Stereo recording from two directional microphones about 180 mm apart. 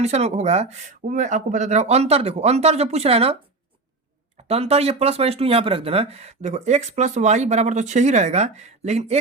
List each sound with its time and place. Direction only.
0.0 s speech: 35° right (ahead or behind)
4.4 s speech: 35° right (ahead or behind)